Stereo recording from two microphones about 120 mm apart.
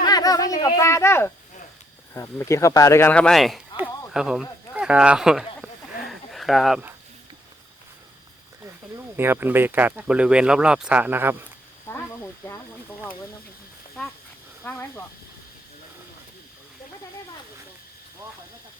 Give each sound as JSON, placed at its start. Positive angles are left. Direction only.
{"t": 0.0, "sound": "speech", "side_deg": 30}
{"t": 6.0, "sound": "a sound", "side_deg": 0}
{"t": 8.6, "sound": "speech", "side_deg": -20}
{"t": 11.9, "sound": "speech", "side_deg": 20}
{"t": 14.6, "sound": "speech", "side_deg": 15}